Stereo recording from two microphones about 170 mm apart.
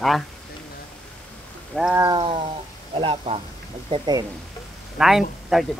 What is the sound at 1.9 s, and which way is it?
Wild animals, 25° right (ahead or behind).